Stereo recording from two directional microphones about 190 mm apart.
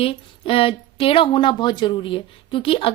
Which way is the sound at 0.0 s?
30° left (ahead or behind).